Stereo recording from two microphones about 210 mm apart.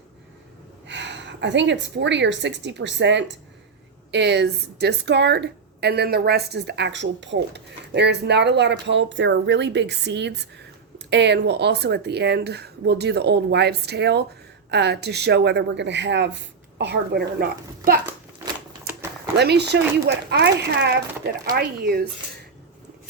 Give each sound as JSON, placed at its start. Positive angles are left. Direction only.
{"t": 0.9, "sound": "a woman's voice", "side_deg": -60}
{"t": 18.4, "sound": "typewriter", "side_deg": -15}
{"t": 19.4, "sound": "speech", "side_deg": -55}